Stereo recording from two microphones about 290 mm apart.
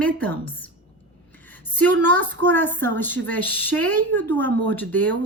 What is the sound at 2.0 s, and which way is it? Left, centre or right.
Speech, centre.